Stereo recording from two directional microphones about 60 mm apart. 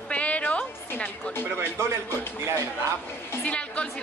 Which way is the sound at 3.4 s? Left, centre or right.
Left.